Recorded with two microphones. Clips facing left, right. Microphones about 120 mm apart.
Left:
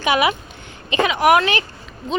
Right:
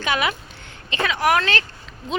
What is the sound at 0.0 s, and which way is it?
Speech, 15° left (ahead or behind).